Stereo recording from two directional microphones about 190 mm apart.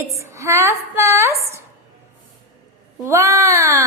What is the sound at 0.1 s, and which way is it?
A woman's voice, 15° right (ahead or behind).